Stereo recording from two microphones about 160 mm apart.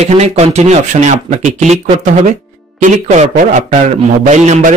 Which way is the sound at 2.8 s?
50° right (ahead or behind).